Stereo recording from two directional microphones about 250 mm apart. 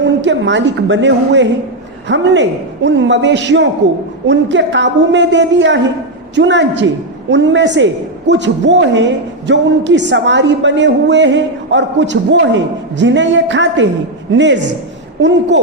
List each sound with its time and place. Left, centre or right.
0.0 s a woman's voice: right